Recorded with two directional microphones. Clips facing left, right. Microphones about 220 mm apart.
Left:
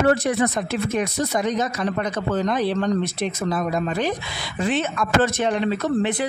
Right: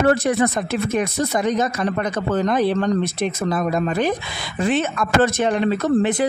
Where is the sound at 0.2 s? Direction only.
50° right (ahead or behind).